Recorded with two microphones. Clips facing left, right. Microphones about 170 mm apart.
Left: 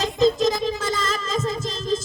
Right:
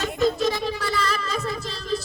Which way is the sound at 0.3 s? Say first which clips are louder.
Left 3 dB; 40° left (ahead or behind).